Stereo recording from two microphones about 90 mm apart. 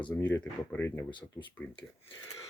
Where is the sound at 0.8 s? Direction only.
30° left (ahead or behind).